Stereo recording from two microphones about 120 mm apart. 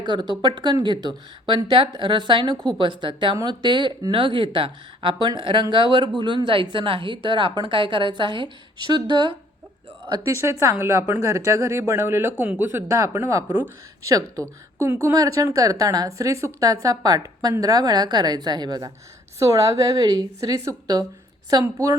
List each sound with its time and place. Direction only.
0.0 s a woman's voice: 40° right (ahead or behind)
10.3 s a woman's voice: 25° right (ahead or behind)
19.4 s a woman's voice: 25° right (ahead or behind)